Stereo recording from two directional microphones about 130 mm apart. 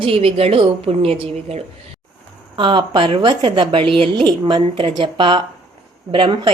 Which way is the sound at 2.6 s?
40° right (ahead or behind).